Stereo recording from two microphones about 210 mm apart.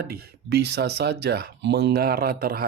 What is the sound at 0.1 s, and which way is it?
Speech, 50° right (ahead or behind).